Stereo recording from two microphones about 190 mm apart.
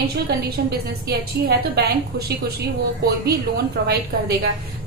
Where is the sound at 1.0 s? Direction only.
55° right (ahead or behind).